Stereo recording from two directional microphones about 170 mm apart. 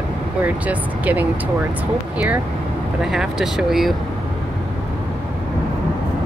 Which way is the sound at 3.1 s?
Centre (ahead or behind).